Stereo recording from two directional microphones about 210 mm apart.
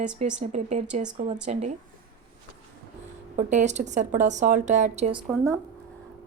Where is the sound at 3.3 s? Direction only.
35° right (ahead or behind).